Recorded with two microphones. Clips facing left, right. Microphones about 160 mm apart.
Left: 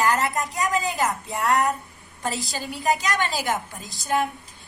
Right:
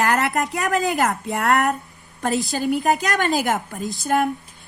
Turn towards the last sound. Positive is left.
turn(degrees=-50)  # may be behind; listen again after turning